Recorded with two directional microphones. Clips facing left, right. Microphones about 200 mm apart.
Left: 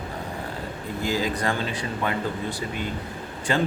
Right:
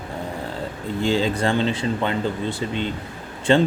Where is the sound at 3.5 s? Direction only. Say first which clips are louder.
Right 7 dB; 25° right (ahead or behind).